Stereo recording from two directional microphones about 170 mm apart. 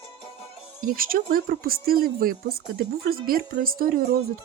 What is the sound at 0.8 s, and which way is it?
Speech, 55° right (ahead or behind).